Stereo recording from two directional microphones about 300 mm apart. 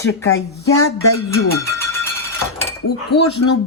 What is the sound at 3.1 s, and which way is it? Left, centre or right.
Speech, left.